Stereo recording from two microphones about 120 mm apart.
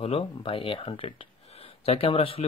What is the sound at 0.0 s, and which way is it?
Speech, 50° left (ahead or behind).